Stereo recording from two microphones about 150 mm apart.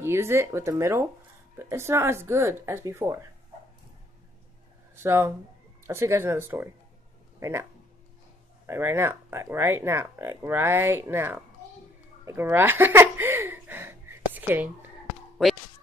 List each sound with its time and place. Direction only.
0.0 s speech: 15° right (ahead or behind)
5.0 s speech: 15° right (ahead or behind)
8.6 s speech: 15° right (ahead or behind)
12.3 s a sound: 15° right (ahead or behind)